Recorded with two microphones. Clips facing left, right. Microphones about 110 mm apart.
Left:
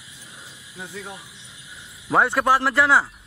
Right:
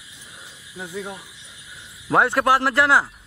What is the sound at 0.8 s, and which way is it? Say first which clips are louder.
Speech: right 4 dB; 10° right (ahead or behind).